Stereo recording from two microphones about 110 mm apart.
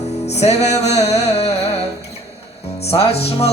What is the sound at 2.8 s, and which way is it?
Music, 65° left (ahead or behind).